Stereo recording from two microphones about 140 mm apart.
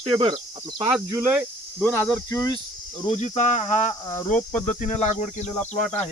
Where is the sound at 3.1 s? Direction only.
55° left (ahead or behind).